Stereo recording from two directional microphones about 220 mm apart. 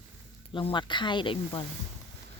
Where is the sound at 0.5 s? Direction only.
20° left (ahead or behind).